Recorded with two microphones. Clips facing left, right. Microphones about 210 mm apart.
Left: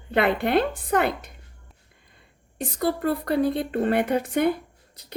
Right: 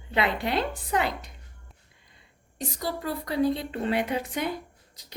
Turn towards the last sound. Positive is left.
turn(degrees=55)  # may be behind; listen again after turning